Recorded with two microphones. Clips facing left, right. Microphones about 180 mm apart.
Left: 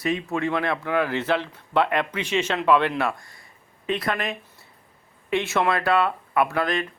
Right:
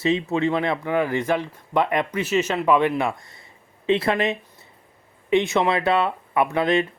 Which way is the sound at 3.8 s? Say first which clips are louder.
Right 6 dB; 25° right (ahead or behind).